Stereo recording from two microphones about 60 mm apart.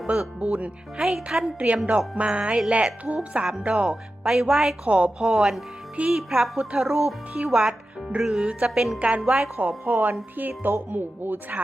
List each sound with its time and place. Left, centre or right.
0.1 s speech: right
1.0 s speech: centre
1.5 s speech: right
4.3 s speech: centre
4.9 s speech: right
9.0 s speech: right